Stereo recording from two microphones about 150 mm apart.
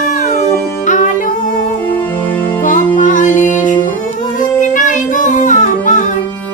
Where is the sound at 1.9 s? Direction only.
10° left (ahead or behind).